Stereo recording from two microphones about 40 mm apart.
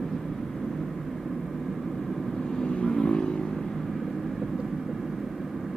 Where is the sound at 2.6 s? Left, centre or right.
Left.